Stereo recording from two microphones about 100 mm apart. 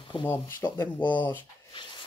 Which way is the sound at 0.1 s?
55° left (ahead or behind).